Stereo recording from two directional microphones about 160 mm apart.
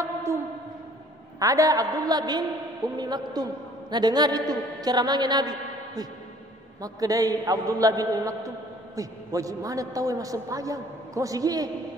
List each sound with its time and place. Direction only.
0.0 s music: 15° right (ahead or behind)
1.4 s a man's voice: 20° right (ahead or behind)